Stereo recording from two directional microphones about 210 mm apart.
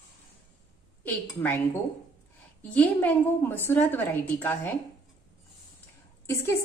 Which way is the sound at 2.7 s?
10° left (ahead or behind).